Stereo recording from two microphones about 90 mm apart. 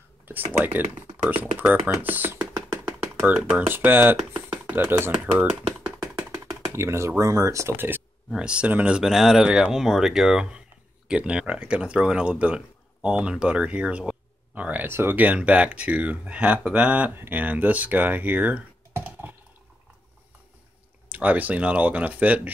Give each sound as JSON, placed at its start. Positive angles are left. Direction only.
{"t": 0.6, "sound": "speech", "side_deg": -15}
{"t": 1.4, "sound": "a sound", "side_deg": -20}
{"t": 3.4, "sound": "speech", "side_deg": -20}
{"t": 6.7, "sound": "speech", "side_deg": -30}
{"t": 7.7, "sound": "speech", "side_deg": -25}
{"t": 8.4, "sound": "speech", "side_deg": -10}
{"t": 9.0, "sound": "speech", "side_deg": -5}
{"t": 21.1, "sound": "speech", "side_deg": -20}